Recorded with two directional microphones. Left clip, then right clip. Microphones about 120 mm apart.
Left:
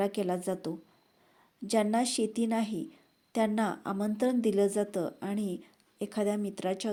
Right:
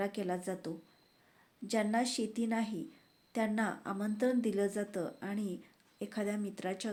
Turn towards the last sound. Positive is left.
turn(degrees=40)  # may be behind; listen again after turning